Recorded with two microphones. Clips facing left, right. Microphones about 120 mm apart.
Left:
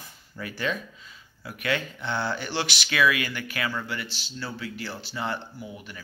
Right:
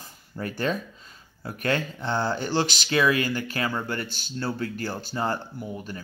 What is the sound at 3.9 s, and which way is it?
Speech, 50° right (ahead or behind).